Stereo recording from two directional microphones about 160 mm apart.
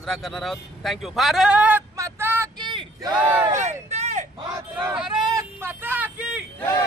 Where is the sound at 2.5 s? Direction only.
25° right (ahead or behind).